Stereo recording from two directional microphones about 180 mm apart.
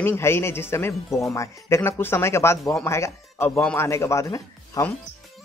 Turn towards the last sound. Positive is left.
turn(degrees=15)  # may be behind; listen again after turning